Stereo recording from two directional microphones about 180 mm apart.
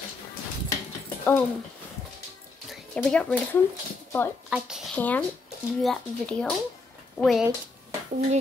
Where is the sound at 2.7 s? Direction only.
5° left (ahead or behind).